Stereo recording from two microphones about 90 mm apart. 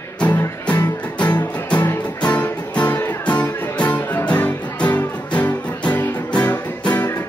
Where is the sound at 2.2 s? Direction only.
15° left (ahead or behind).